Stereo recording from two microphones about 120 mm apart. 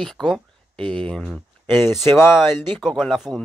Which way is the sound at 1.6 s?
20° left (ahead or behind).